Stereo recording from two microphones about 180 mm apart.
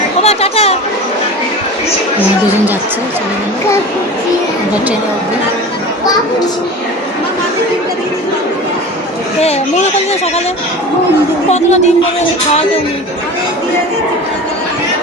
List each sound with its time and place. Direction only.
0.2 s chatter: 35° left (ahead or behind)
9.4 s speech: 35° left (ahead or behind)
11.4 s speech: 40° left (ahead or behind)